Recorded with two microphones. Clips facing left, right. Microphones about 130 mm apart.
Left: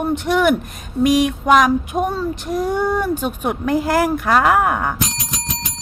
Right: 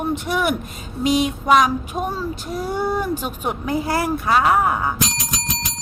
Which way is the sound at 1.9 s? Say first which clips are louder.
Left 4 dB; 20° left (ahead or behind).